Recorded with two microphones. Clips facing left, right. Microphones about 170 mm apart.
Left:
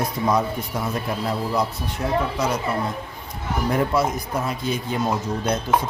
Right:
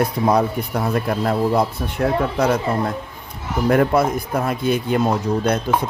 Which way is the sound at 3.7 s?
60° right (ahead or behind).